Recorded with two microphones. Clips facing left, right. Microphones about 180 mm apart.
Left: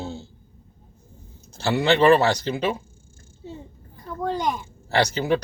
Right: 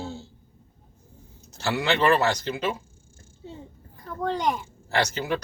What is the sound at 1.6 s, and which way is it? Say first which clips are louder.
Speech: left 5 dB; 30° left (ahead or behind).